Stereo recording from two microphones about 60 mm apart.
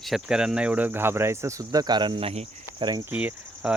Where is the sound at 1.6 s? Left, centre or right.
Right.